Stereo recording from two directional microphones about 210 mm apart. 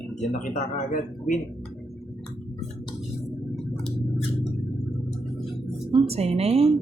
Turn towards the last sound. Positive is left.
turn(degrees=-30)  # may be behind; listen again after turning